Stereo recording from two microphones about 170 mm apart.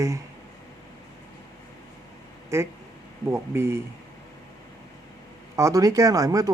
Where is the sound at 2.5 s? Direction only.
15° right (ahead or behind).